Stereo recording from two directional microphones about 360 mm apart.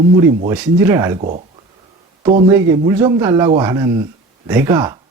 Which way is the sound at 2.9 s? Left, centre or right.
Centre.